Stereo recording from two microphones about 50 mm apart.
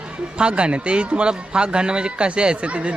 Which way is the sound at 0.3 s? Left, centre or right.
Right.